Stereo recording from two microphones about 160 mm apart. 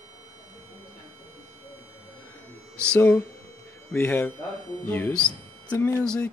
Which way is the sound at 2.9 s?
10° left (ahead or behind).